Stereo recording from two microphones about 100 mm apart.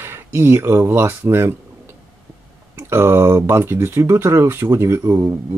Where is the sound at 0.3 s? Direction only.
25° right (ahead or behind).